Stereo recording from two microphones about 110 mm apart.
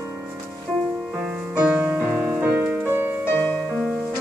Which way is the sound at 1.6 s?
15° right (ahead or behind).